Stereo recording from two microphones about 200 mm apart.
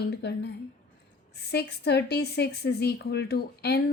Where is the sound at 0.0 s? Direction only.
55° left (ahead or behind).